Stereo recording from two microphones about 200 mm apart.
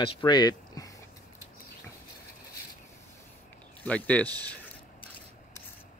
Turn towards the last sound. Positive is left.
turn(degrees=5)  # may be behind; listen again after turning